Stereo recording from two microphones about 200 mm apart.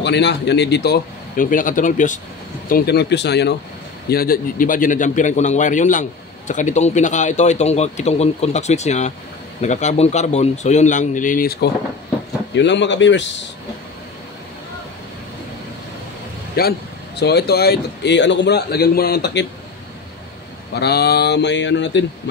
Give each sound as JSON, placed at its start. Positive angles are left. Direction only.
{"t": 0.0, "sound": "speech", "side_deg": 60}
{"t": 2.7, "sound": "a man's voice", "side_deg": 55}
{"t": 12.5, "sound": "a man's voice", "side_deg": 60}
{"t": 16.6, "sound": "a man's voice", "side_deg": 50}
{"t": 20.7, "sound": "a man's voice", "side_deg": 55}